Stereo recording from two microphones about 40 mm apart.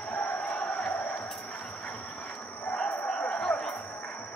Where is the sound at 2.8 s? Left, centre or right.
Left.